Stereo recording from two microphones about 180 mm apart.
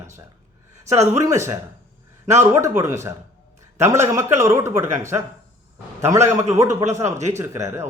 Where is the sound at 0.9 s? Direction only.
15° right (ahead or behind).